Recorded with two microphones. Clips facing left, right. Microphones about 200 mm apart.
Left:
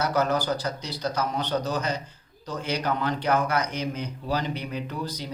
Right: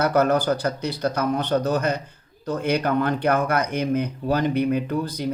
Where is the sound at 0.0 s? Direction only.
55° right (ahead or behind).